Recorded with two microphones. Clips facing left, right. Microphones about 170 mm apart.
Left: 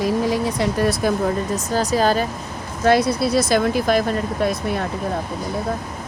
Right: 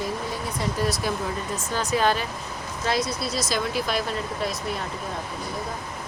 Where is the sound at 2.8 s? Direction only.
60° left (ahead or behind).